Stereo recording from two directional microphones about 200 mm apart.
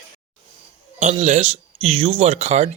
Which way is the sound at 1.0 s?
35° right (ahead or behind).